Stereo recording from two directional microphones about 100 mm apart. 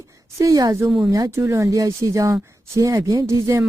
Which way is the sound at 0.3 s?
35° right (ahead or behind).